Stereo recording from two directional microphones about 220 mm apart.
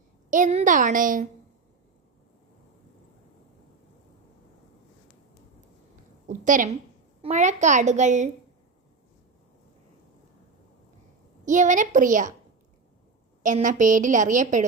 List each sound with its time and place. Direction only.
0.3 s a woman's voice: 35° right (ahead or behind)
6.2 s a sound: 35° right (ahead or behind)
7.2 s a woman's voice: 30° right (ahead or behind)
11.4 s a woman's voice: 35° right (ahead or behind)
13.4 s a woman's voice: 35° right (ahead or behind)